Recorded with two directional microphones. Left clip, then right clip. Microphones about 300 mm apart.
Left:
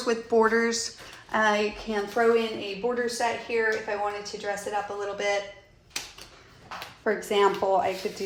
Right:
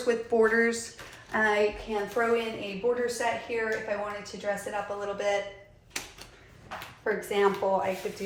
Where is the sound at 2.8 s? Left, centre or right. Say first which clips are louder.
Right 1 dB; left.